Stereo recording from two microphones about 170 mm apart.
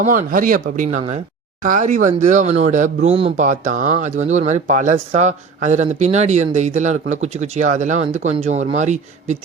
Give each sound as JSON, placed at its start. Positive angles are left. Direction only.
{"t": 0.0, "sound": "speech", "side_deg": -50}